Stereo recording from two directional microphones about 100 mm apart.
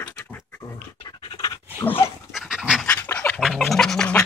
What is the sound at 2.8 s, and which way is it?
Pant, 15° left (ahead or behind).